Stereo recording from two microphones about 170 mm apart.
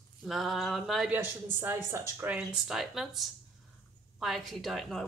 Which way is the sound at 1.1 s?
15° right (ahead or behind).